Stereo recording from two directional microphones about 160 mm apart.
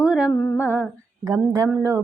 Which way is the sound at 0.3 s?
15° left (ahead or behind).